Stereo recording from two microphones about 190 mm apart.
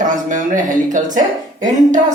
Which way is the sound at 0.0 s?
40° right (ahead or behind).